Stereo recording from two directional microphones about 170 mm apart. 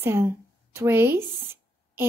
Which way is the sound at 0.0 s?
15° right (ahead or behind).